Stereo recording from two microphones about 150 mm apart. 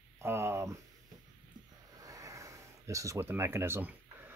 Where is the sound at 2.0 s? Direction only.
20° right (ahead or behind).